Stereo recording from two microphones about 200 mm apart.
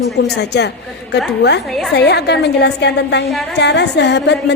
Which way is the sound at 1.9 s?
55° left (ahead or behind).